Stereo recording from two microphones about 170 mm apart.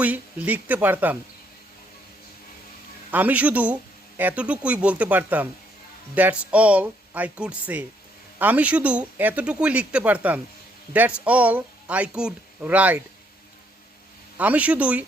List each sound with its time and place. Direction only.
0.0 s speech: 10° right (ahead or behind)
3.1 s speech: 10° right (ahead or behind)
14.3 s speech: 10° right (ahead or behind)